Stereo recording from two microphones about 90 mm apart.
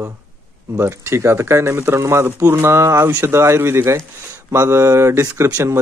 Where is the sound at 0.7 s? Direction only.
35° right (ahead or behind).